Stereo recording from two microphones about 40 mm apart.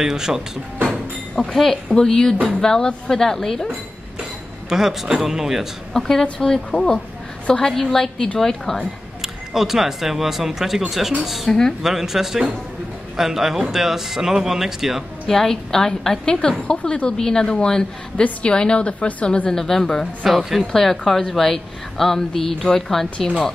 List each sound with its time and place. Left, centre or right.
0.0 s a man's voice: centre
0.8 s a woman's voice: centre
4.6 s a man's voice: centre
5.9 s a woman's voice: centre
7.6 s a woman's voice: centre
9.2 s a man's voice: centre
15.2 s a woman's voice: centre; by 19.5 s left
19.5 s a woman's voice: centre
20.2 s speech: centre
20.7 s a woman's voice: centre